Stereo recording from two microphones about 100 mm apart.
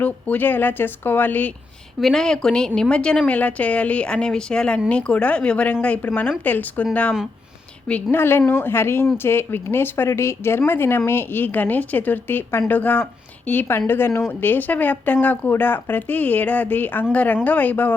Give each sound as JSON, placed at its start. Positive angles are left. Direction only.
{"t": 0.0, "sound": "speech", "side_deg": 15}
{"t": 2.0, "sound": "a woman's voice", "side_deg": 5}
{"t": 8.1, "sound": "a woman's voice", "side_deg": 20}